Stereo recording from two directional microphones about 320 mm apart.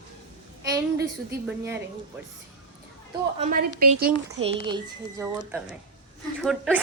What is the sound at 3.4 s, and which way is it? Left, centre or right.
Speech, right.